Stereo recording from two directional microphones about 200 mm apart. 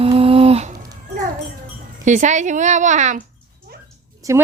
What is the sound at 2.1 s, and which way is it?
A woman's voice, 35° right (ahead or behind).